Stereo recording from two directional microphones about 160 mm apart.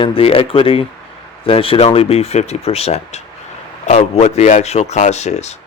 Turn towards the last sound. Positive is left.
turn(degrees=45)  # may be behind; listen again after turning